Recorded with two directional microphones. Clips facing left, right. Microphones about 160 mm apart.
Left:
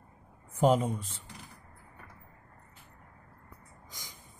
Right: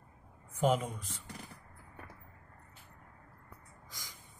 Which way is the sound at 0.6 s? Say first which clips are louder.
Left 5 dB; 35° left (ahead or behind).